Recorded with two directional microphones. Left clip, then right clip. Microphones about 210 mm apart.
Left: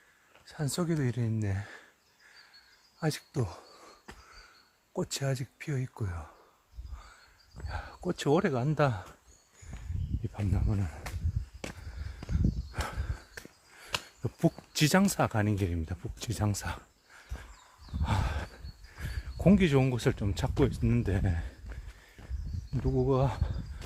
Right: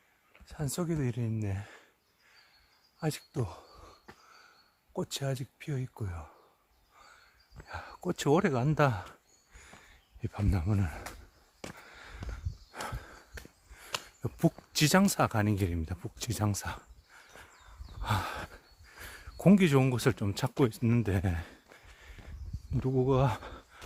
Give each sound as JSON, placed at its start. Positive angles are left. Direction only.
{"t": 0.4, "sound": "speech", "side_deg": 0}
{"t": 3.0, "sound": "speech", "side_deg": 0}
{"t": 4.9, "sound": "speech", "side_deg": -5}
{"t": 7.6, "sound": "speech", "side_deg": -15}
{"t": 10.3, "sound": "speech", "side_deg": -35}
{"t": 11.6, "sound": "a sound", "side_deg": 5}
{"t": 12.7, "sound": "walk", "side_deg": -5}
{"t": 14.2, "sound": "a sound", "side_deg": -20}
{"t": 14.7, "sound": "speech", "side_deg": -15}
{"t": 18.0, "sound": "a sound", "side_deg": -20}
{"t": 20.6, "sound": "speech", "side_deg": -25}
{"t": 22.9, "sound": "speech", "side_deg": -30}